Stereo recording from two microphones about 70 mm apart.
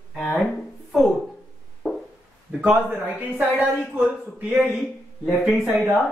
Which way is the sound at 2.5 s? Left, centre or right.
Right.